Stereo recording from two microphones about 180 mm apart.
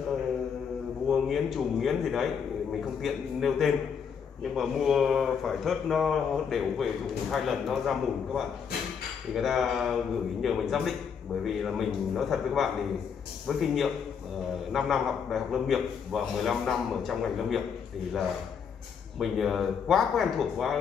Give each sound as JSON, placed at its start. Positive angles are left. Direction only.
{"t": 1.0, "sound": "a man's voice", "side_deg": 0}
{"t": 19.1, "sound": "speech", "side_deg": 0}